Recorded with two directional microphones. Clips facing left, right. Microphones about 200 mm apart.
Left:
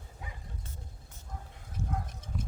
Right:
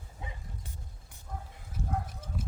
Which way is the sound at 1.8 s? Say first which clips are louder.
Even; 15° right (ahead or behind).